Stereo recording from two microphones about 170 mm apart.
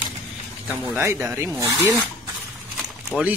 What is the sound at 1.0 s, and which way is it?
Speech, 15° right (ahead or behind).